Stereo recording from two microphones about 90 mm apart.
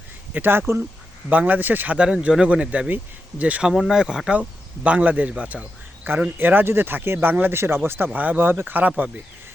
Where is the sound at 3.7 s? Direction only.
5° right (ahead or behind).